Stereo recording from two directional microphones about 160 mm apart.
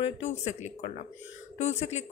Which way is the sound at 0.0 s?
45° left (ahead or behind).